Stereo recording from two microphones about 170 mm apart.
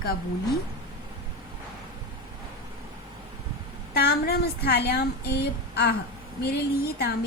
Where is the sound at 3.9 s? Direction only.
70° left (ahead or behind).